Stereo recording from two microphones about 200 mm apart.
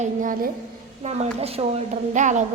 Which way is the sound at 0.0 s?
40° right (ahead or behind).